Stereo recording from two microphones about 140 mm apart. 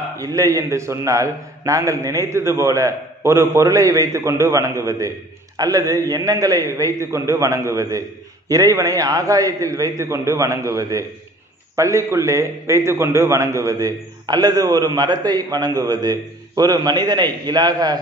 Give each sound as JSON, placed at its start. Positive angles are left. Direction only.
{"t": 0.2, "sound": "a man's voice", "side_deg": -25}